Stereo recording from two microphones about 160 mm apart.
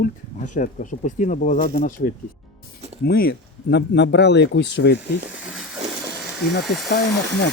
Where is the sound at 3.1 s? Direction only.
85° left.